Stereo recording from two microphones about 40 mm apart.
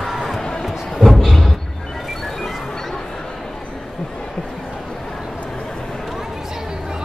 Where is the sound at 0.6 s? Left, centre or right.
Centre.